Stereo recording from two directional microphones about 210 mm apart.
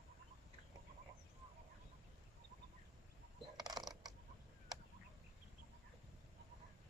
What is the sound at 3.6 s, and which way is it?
Mechanisms, 20° right (ahead or behind).